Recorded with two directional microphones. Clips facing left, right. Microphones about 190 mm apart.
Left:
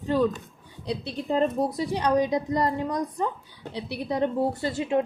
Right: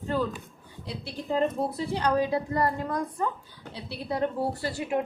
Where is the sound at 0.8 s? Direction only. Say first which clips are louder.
Left 4 dB; 20° left (ahead or behind).